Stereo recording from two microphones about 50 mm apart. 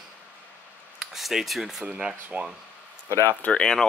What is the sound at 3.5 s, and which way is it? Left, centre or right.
Speech, centre.